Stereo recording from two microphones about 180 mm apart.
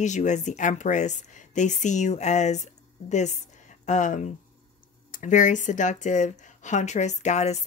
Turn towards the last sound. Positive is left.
turn(degrees=40)  # may be behind; listen again after turning